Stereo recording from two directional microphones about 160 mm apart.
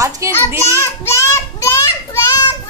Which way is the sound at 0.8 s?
15° left (ahead or behind).